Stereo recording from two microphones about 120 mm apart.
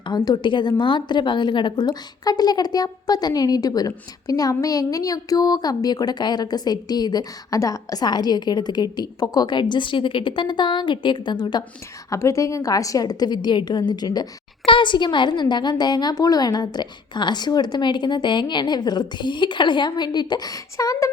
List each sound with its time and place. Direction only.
0.1 s speech: 35° left (ahead or behind)
12.1 s speech: 25° left (ahead or behind)